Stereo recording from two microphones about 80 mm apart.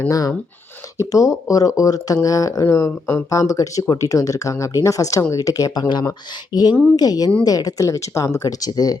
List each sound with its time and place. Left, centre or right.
0.1 s speech: left